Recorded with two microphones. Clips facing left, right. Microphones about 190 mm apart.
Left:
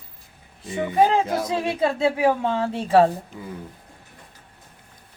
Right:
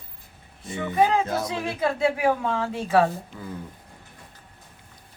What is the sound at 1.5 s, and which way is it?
A woman's voice, 30° left (ahead or behind).